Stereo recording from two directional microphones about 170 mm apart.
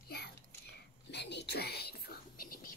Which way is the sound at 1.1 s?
85° left.